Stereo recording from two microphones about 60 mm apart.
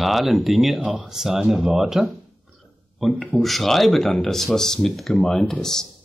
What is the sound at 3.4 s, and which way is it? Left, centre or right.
A man's voice, centre.